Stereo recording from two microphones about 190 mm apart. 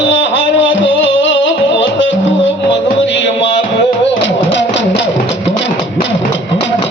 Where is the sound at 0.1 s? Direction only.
75° left (ahead or behind).